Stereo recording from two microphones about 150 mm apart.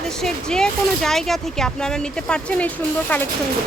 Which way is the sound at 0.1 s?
5° left (ahead or behind).